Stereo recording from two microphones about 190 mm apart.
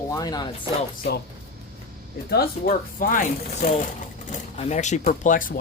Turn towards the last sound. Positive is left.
turn(degrees=45)  # may be behind; listen again after turning